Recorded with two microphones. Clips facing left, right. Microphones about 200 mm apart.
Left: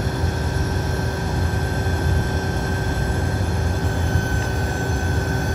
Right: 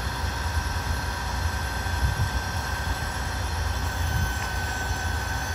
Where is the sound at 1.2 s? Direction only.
50° left (ahead or behind).